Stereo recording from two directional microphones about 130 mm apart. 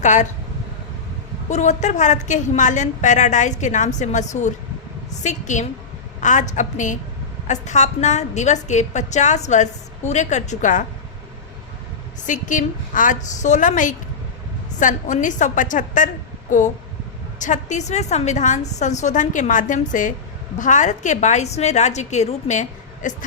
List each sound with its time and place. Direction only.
0.0 s speech: 70° left (ahead or behind)
1.5 s a woman's voice: 65° left (ahead or behind)
7.4 s a woman's voice: 65° left (ahead or behind)
12.2 s a woman's voice: 80° left
17.4 s a woman's voice: 70° left (ahead or behind)